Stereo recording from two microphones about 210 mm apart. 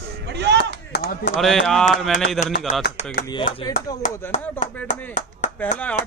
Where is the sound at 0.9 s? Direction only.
50° left (ahead or behind).